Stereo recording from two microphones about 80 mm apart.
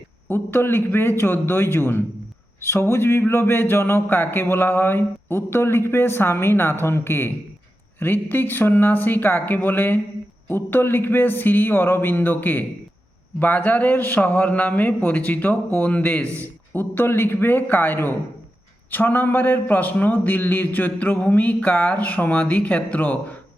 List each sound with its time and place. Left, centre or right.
0.3 s speech: left
16.2 s a man's voice: right
16.7 s speech: left